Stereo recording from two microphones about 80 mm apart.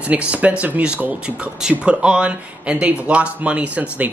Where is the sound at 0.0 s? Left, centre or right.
Centre.